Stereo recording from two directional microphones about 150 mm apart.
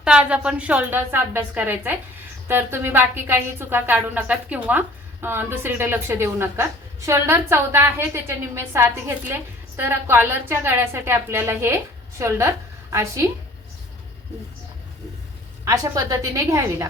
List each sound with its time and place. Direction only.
0.0 s a woman's voice: 5° right (ahead or behind)
15.6 s a woman's voice: 25° right (ahead or behind)